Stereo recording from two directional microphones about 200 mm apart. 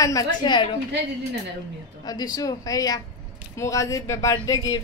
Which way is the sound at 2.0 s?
20° left (ahead or behind).